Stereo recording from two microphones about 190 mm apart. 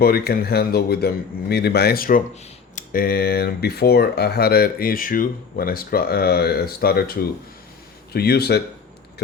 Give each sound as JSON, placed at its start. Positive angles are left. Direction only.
{"t": 0.0, "sound": "speech", "side_deg": 55}
{"t": 8.1, "sound": "speech", "side_deg": 55}